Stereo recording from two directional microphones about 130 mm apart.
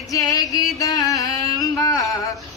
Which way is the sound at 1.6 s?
30° left (ahead or behind).